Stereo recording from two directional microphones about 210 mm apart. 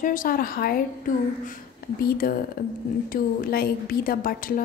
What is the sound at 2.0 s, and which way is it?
A woman's voice, 45° left (ahead or behind).